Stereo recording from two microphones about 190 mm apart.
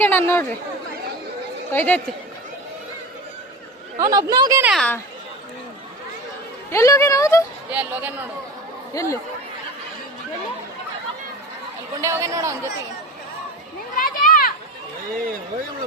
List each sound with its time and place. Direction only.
0.0 s speech: 10° left (ahead or behind)
1.7 s speech: 10° left (ahead or behind)
3.9 s speech: 20° right (ahead or behind)
4.6 s a woman's voice: centre (ahead or behind)
6.7 s speech: 15° left (ahead or behind)
7.7 s speech: 10° right (ahead or behind)
8.9 s speech: 15° left (ahead or behind)
12.0 s speech: 15° right (ahead or behind)
13.9 s a sound: 45° left (ahead or behind)